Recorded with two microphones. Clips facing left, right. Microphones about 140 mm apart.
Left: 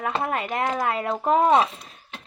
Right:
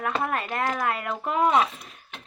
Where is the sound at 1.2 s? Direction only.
35° left (ahead or behind).